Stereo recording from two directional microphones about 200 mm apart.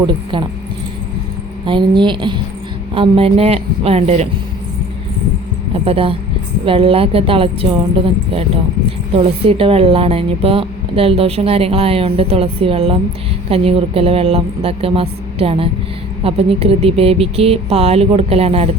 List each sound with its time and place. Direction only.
1.6 s a woman's voice: 25° right (ahead or behind)
5.7 s a woman's voice: 30° right (ahead or behind)
9.1 s a woman's voice: 30° right (ahead or behind)